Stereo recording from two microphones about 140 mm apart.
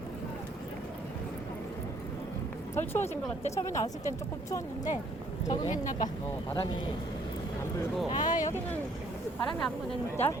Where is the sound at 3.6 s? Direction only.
20° left (ahead or behind).